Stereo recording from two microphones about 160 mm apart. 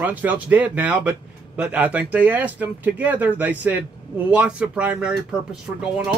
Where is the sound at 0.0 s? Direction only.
10° right (ahead or behind).